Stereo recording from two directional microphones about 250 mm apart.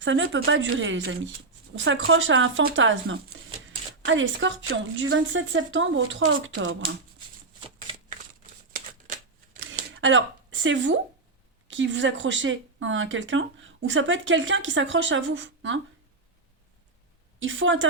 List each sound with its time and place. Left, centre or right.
0.0 s speech: right
8.7 s shuffling cards: right
9.9 s speech: right
17.4 s speech: right